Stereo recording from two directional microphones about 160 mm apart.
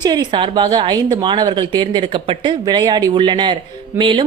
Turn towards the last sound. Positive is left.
turn(degrees=-30)  # may be behind; listen again after turning